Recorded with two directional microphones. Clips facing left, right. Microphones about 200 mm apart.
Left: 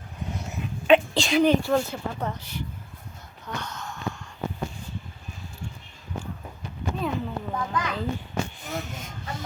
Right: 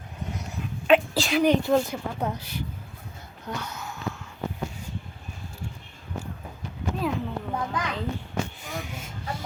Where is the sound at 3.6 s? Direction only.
5° right (ahead or behind).